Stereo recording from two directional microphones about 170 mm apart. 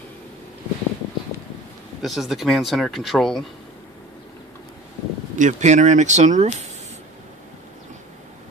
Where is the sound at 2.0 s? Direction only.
Centre (ahead or behind).